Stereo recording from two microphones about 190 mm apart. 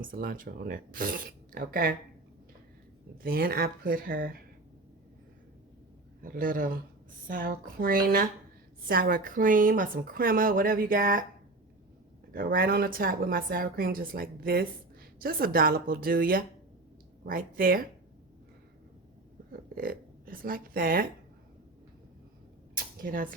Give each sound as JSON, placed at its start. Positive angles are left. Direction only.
{"t": 0.0, "sound": "speech", "side_deg": -45}
{"t": 3.2, "sound": "speech", "side_deg": -50}
{"t": 6.2, "sound": "speech", "side_deg": -45}
{"t": 12.3, "sound": "speech", "side_deg": -50}
{"t": 19.7, "sound": "speech", "side_deg": -50}
{"t": 22.7, "sound": "cap gun", "side_deg": -45}